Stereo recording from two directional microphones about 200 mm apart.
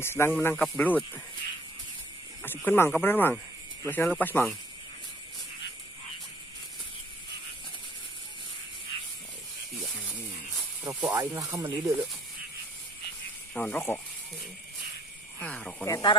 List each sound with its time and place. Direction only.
0.0 s speech: 10° left (ahead or behind)
2.4 s speech: 10° left (ahead or behind)
10.8 s speech: 10° right (ahead or behind)
13.6 s speech: 10° left (ahead or behind)
15.3 s speech: 5° left (ahead or behind)
15.9 s speech: 20° left (ahead or behind)